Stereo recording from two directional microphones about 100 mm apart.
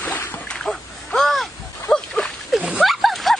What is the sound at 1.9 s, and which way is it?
Dog, 5° left (ahead or behind).